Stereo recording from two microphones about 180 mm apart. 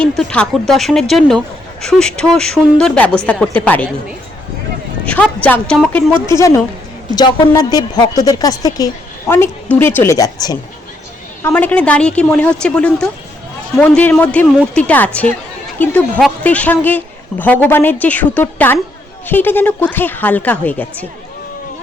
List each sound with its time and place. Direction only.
0.0 s a woman's voice: 5° left (ahead or behind)
5.0 s a woman's voice: 5° left (ahead or behind)
6.2 s a woman's voice: 15° left (ahead or behind)
11.4 s a woman's voice: 10° left (ahead or behind)